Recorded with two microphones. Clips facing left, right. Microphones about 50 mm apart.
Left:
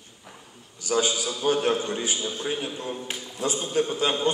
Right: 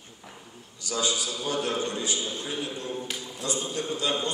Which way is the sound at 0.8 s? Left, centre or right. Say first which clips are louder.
Left 4 dB; left.